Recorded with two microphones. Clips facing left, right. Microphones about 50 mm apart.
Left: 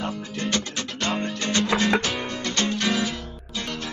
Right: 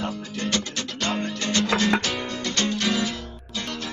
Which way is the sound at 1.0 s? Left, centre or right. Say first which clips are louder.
Even; centre.